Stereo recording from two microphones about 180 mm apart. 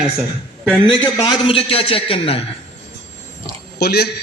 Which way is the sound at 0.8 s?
25° left (ahead or behind).